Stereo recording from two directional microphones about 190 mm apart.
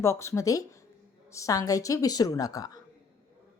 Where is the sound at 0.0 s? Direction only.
15° left (ahead or behind).